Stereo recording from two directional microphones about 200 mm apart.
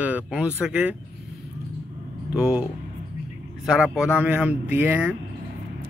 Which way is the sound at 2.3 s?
5° right (ahead or behind).